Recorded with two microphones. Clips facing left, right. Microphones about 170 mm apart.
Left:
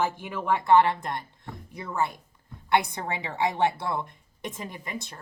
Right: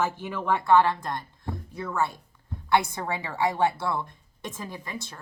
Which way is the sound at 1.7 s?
15° left (ahead or behind).